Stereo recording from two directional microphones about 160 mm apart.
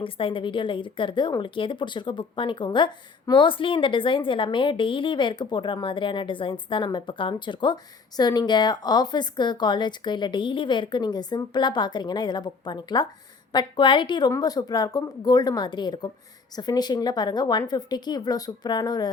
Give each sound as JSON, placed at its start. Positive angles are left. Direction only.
{"t": 0.0, "sound": "a woman's voice", "side_deg": 35}